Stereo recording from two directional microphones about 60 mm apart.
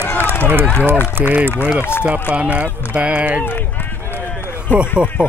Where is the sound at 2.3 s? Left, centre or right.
Right.